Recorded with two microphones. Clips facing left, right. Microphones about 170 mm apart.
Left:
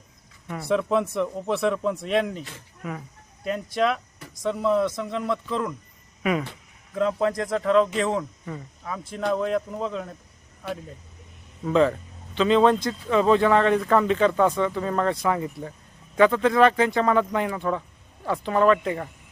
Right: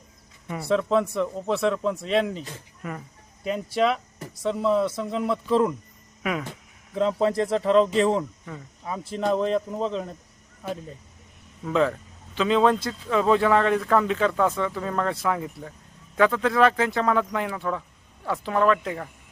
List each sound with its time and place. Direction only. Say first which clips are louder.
0.4 s a man's voice: even; centre (ahead or behind)
6.9 s speech: right 1 dB; 25° right (ahead or behind)
11.6 s speech: left 3 dB; centre (ahead or behind)